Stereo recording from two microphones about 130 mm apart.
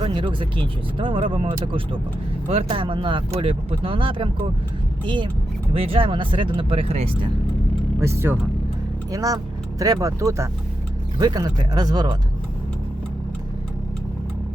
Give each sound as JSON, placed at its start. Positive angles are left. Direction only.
{"t": 0.0, "sound": "speech", "side_deg": -40}
{"t": 7.9, "sound": "speech", "side_deg": -20}